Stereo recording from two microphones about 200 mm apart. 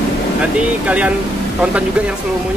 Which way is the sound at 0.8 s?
5° right (ahead or behind).